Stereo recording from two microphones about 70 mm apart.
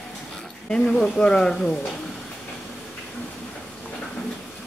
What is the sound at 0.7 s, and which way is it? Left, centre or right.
Speech, centre.